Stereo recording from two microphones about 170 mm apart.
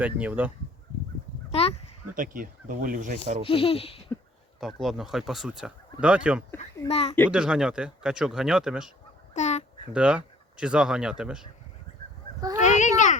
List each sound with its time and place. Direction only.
0.0 s speech: 10° right (ahead or behind)
1.5 s a sound: 35° left (ahead or behind)
2.1 s speech: 55° right (ahead or behind)
3.4 s speech: 35° left (ahead or behind)
4.6 s speech: centre (ahead or behind)
6.8 s speech: 35° left (ahead or behind)
7.3 s speech: 5° right (ahead or behind)
9.3 s a sound: 45° left (ahead or behind)
9.9 s speech: 5° right (ahead or behind)
11.9 s fowl: 35° left (ahead or behind)
12.6 s a sound: 45° left (ahead or behind)